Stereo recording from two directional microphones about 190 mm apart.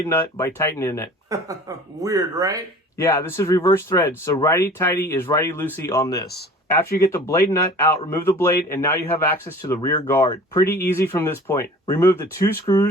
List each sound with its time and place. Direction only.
0.0 s a man's voice: 15° left (ahead or behind)
2.0 s speech: 20° right (ahead or behind)
3.0 s a man's voice: 15° left (ahead or behind)